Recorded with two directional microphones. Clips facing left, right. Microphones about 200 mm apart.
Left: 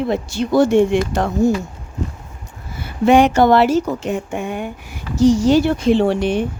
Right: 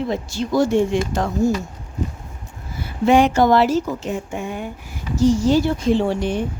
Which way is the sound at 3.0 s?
65° left (ahead or behind).